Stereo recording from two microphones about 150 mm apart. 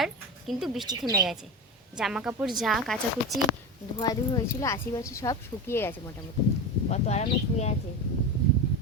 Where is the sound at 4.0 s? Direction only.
25° left (ahead or behind).